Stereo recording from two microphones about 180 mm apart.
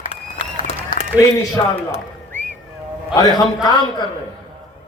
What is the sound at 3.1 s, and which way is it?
Speech, 20° left (ahead or behind).